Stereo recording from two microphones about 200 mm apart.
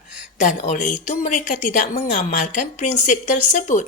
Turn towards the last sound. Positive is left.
turn(degrees=40)  # may be behind; listen again after turning